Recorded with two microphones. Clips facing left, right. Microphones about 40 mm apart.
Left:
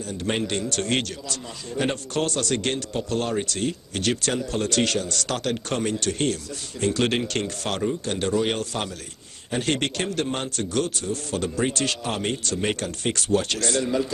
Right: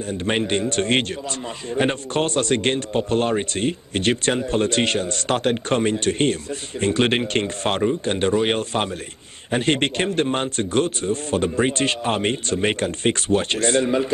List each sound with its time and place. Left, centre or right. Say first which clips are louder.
0.2 s a man's voice: right 4 dB; right